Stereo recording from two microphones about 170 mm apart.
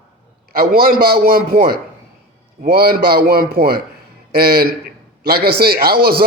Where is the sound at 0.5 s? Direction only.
60° right (ahead or behind).